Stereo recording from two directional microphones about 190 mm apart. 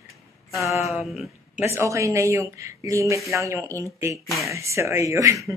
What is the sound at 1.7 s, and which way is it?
A woman's voice, 15° right (ahead or behind).